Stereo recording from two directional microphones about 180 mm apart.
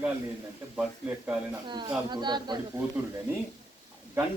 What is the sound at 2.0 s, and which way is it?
Speech, 25° right (ahead or behind).